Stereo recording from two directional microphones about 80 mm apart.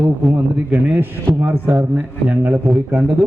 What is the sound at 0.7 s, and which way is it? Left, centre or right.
A man's voice, right.